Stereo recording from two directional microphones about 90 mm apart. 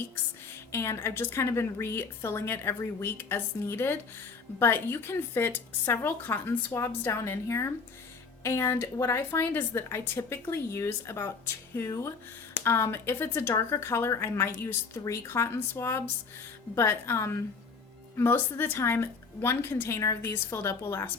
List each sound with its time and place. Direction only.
0.7 s speech: 30° left (ahead or behind)
6.7 s a woman's voice: 30° left (ahead or behind)